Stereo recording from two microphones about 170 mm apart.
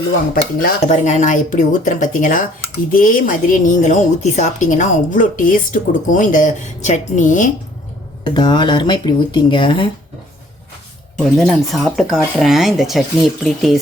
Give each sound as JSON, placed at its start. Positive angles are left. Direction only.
{"t": 0.6, "sound": "a woman's voice", "side_deg": 50}
{"t": 8.2, "sound": "speech", "side_deg": 25}
{"t": 11.2, "sound": "speech", "side_deg": 0}